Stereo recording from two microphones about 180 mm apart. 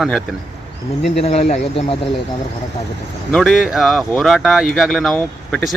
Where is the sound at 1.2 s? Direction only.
35° left (ahead or behind).